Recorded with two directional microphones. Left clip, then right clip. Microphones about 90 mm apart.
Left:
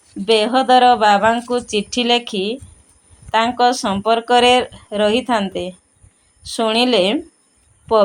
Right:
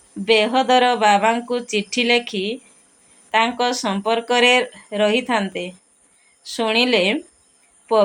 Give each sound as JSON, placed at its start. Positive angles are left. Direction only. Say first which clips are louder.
{"t": 0.3, "sound": "speech", "louder": "left 2 dB", "side_deg": 35}